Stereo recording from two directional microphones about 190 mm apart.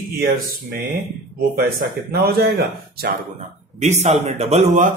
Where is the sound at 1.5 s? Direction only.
55° right (ahead or behind).